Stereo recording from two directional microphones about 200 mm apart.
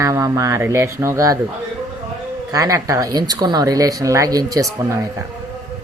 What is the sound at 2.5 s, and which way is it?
Speech, 15° right (ahead or behind).